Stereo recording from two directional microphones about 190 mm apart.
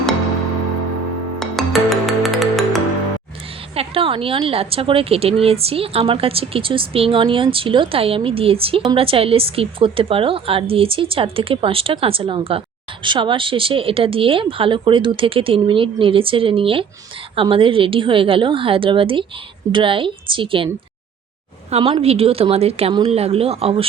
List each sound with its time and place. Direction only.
1.4 s music: centre (ahead or behind)
3.8 s a woman's voice: 30° right (ahead or behind)
21.7 s speech: 30° right (ahead or behind)